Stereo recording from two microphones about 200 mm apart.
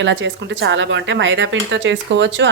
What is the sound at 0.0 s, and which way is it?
A woman's voice, 65° right (ahead or behind).